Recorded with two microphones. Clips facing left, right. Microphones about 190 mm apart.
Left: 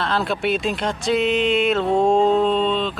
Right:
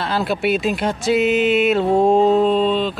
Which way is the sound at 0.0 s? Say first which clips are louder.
Right 2 dB; 5° right (ahead or behind).